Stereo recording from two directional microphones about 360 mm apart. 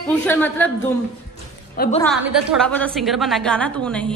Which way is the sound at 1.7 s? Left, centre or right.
Left.